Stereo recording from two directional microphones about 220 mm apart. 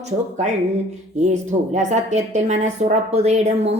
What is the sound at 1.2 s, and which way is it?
A woman's voice, 30° right (ahead or behind).